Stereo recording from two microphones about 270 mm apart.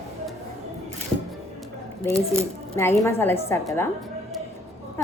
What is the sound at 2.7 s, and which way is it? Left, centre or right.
A woman's voice, centre.